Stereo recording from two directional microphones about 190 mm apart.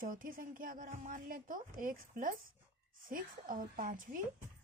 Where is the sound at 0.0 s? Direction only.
45° right (ahead or behind).